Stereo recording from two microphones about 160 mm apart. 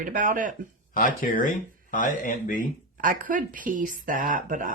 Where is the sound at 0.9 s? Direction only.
55° left (ahead or behind).